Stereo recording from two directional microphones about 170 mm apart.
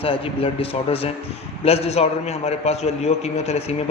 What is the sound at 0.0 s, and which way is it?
A man's voice, 35° left (ahead or behind).